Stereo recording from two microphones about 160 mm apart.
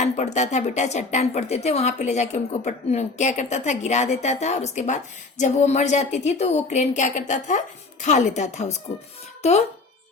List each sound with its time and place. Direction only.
0.2 s a woman's voice: 45° left (ahead or behind)